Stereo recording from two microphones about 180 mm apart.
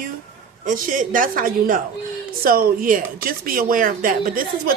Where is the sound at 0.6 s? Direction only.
45° right (ahead or behind).